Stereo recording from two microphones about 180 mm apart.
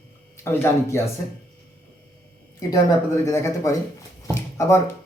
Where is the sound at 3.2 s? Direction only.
15° left (ahead or behind).